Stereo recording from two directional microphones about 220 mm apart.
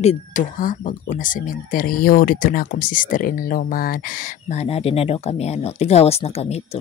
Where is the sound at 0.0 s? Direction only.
30° left (ahead or behind).